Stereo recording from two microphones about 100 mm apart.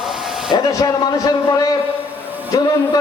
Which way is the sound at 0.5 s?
40° left (ahead or behind).